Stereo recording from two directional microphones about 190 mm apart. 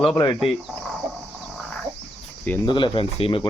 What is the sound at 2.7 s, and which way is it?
Speech, 25° left (ahead or behind).